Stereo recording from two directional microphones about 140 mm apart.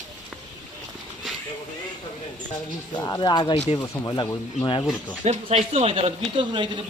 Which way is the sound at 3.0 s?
30° left (ahead or behind).